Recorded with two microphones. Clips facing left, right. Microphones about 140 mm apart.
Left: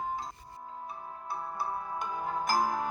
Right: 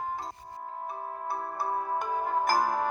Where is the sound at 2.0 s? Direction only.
55° right (ahead or behind).